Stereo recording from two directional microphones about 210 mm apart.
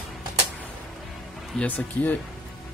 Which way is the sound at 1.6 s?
10° left (ahead or behind).